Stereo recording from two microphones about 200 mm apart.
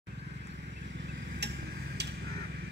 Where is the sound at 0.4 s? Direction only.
60° right (ahead or behind).